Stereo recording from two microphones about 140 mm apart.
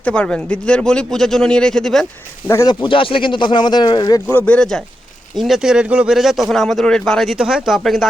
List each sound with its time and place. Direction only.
0.0 s speech: 10° left (ahead or behind)
2.5 s speech: 20° left (ahead or behind)
2.8 s speech: 40° left (ahead or behind)
4.3 s speech: 10° left (ahead or behind)